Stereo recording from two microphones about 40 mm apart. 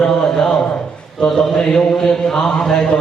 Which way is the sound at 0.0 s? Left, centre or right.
Centre.